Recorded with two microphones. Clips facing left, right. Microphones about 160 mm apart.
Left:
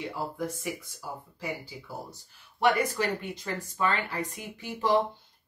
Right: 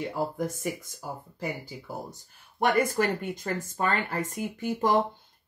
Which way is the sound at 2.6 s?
50° right (ahead or behind).